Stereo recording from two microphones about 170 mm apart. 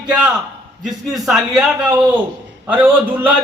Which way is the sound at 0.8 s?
Centre (ahead or behind).